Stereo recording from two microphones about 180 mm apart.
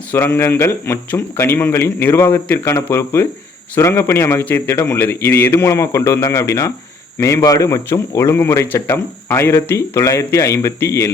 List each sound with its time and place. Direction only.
0.1 s speech: 15° left (ahead or behind)